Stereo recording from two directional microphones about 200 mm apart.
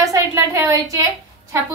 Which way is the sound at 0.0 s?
15° right (ahead or behind).